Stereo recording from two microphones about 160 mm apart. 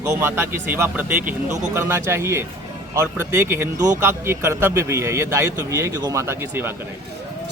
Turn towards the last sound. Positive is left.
turn(degrees=-15)  # may be behind; listen again after turning